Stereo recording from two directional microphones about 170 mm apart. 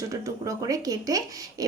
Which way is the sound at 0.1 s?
20° right (ahead or behind).